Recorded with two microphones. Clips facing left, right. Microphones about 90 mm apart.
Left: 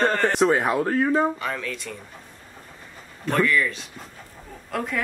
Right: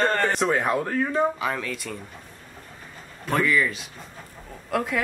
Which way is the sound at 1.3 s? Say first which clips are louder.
Right 1 dB; 5° right (ahead or behind).